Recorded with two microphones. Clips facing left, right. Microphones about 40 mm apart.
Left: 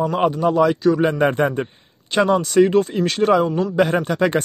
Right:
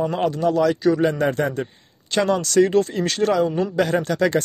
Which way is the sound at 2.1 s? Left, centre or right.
Centre.